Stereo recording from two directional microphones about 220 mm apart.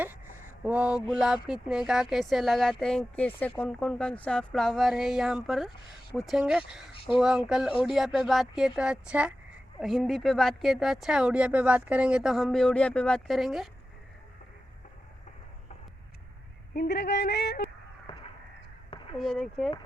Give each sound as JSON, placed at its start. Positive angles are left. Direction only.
{"t": 0.0, "sound": "speech", "side_deg": -10}
{"t": 6.9, "sound": "speech", "side_deg": 25}
{"t": 7.2, "sound": "speech", "side_deg": 0}
{"t": 16.7, "sound": "a sound", "side_deg": 45}
{"t": 19.1, "sound": "speech", "side_deg": 0}